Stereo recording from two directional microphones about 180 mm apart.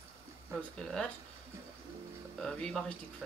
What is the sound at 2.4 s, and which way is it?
Speech, 5° left (ahead or behind).